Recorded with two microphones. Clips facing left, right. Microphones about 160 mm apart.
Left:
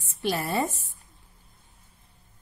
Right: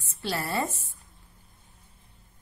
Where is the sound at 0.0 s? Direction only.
15° left (ahead or behind).